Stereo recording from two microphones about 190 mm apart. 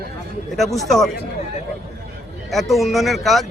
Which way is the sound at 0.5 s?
Centre (ahead or behind).